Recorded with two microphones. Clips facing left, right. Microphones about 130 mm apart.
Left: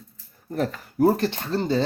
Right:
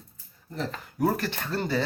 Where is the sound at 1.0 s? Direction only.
30° left (ahead or behind).